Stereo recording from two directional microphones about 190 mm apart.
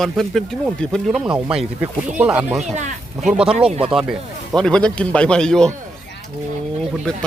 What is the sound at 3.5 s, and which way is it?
Speech, 30° right (ahead or behind).